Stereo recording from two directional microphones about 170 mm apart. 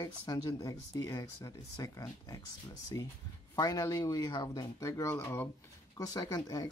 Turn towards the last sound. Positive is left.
turn(degrees=20)  # may be behind; listen again after turning